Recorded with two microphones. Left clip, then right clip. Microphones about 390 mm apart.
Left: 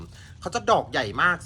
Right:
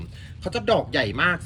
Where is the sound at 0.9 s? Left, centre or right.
Left.